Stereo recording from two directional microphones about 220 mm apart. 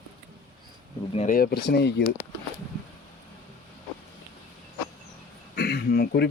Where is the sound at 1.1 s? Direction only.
40° left (ahead or behind).